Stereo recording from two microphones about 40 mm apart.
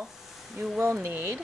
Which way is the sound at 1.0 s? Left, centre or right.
Right.